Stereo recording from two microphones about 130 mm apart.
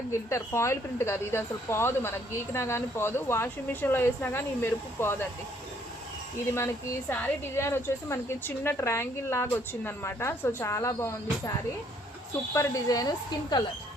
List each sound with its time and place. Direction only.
0.1 s a woman's voice: 20° left (ahead or behind)
7.1 s a woman's voice: 15° left (ahead or behind)
12.5 s a woman's voice: 25° left (ahead or behind)